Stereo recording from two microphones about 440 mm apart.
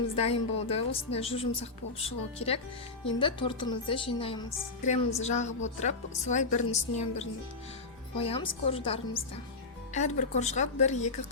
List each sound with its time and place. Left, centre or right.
0.2 s a woman's voice: centre